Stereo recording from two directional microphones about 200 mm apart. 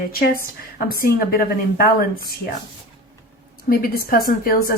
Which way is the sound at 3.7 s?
45° left (ahead or behind).